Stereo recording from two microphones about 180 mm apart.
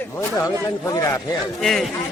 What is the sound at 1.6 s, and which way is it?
Speech, centre (ahead or behind).